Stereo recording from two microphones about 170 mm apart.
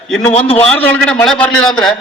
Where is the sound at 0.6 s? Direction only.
10° left (ahead or behind).